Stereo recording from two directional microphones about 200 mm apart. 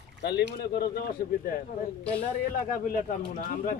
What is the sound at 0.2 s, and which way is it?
Speech, 55° left (ahead or behind).